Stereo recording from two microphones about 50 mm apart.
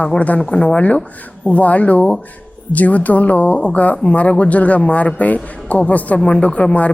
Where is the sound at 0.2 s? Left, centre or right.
Left.